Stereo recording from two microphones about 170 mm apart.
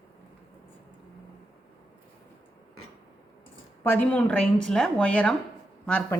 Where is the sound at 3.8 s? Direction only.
10° left (ahead or behind).